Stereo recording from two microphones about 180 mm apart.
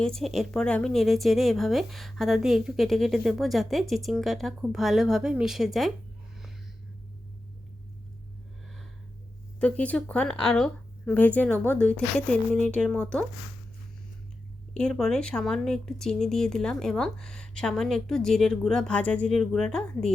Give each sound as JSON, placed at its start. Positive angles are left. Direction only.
{"t": 0.0, "sound": "speech", "side_deg": 5}
{"t": 9.6, "sound": "speech", "side_deg": 5}
{"t": 14.7, "sound": "speech", "side_deg": 5}